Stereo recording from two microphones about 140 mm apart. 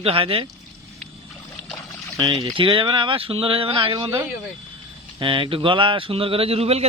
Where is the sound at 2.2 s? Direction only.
25° right (ahead or behind).